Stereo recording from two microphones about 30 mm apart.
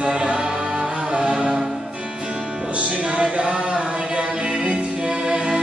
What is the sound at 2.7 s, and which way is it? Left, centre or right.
Music, right.